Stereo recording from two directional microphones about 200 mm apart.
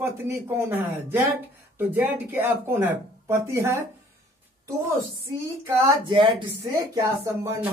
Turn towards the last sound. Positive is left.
turn(degrees=-15)  # may be behind; listen again after turning